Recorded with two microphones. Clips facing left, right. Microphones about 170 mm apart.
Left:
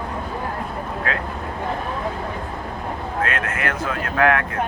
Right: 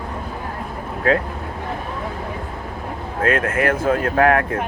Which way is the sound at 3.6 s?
50° right (ahead or behind).